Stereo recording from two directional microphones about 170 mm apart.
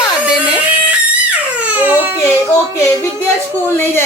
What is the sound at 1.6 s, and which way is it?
Crying, 10° right (ahead or behind).